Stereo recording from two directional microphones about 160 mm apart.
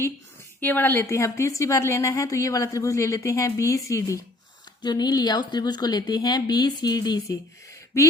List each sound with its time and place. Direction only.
0.6 s a woman's voice: 10° left (ahead or behind)